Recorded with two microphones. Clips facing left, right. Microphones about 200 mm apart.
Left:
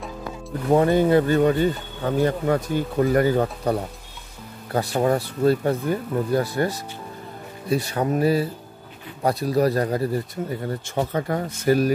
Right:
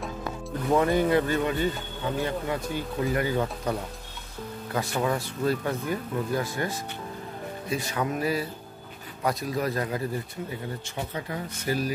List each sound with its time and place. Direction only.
0.7 s speech: 30° left (ahead or behind)
4.7 s speech: 35° left (ahead or behind)
11.0 s speech: 50° left (ahead or behind)